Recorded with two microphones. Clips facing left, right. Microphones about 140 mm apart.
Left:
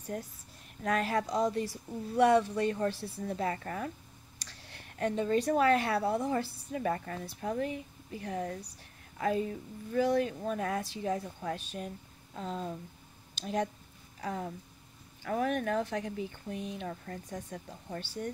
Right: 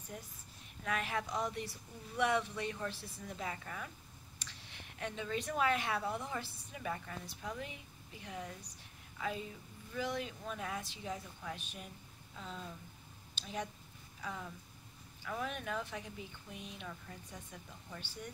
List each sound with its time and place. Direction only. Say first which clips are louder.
0.1 s speech: left 10 dB; 50° left (ahead or behind)
0.8 s speech: left 8 dB; 40° left (ahead or behind)
3.0 s speech: left 10 dB; 35° left (ahead or behind)
3.3 s speech: left 8 dB; 50° left (ahead or behind); by 6.3 s 35° left (ahead or behind)
6.3 s speech: left 10 dB; 50° left (ahead or behind)
14.2 s speech: left 8 dB; 55° left (ahead or behind)